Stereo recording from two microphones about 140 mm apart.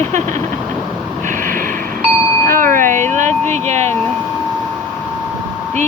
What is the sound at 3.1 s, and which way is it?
Speech, 55° right (ahead or behind).